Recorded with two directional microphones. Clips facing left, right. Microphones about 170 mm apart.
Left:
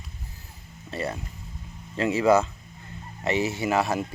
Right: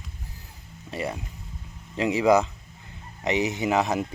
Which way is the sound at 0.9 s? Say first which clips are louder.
Even; 15° right (ahead or behind).